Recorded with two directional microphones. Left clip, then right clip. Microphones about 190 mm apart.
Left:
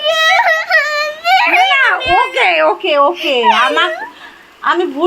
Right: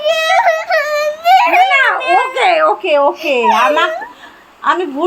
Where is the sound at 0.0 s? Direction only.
10° right (ahead or behind).